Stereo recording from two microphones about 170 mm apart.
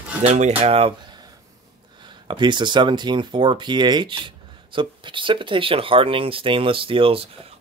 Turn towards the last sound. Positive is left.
turn(degrees=-35)  # may be behind; listen again after turning